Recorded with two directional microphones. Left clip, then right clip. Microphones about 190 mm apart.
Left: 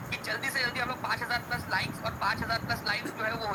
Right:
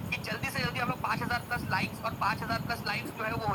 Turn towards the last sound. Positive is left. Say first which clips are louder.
# left 1 dB
turn(degrees=0)  # may be behind; listen again after turning